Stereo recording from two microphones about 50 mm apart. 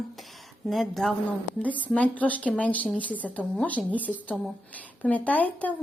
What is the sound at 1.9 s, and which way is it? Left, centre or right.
A woman's voice, left.